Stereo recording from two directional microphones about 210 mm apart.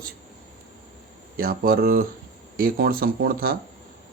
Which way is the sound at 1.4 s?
45° right (ahead or behind).